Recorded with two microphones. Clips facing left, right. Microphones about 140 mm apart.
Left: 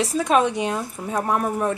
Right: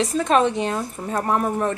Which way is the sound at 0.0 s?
5° left (ahead or behind).